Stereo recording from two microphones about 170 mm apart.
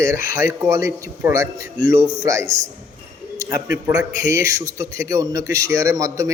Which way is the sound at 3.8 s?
15° right (ahead or behind).